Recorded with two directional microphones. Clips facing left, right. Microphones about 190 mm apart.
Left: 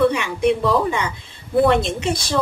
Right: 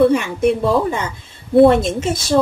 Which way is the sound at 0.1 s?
45° right (ahead or behind).